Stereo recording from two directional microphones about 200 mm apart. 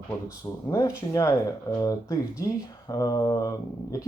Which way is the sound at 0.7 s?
15° left (ahead or behind).